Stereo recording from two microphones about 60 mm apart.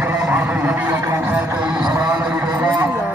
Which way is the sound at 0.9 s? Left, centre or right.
Right.